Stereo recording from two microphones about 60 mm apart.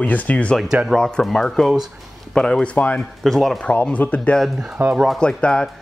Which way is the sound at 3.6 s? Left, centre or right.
Left.